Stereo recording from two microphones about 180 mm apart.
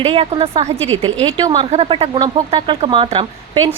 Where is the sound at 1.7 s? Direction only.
35° right (ahead or behind).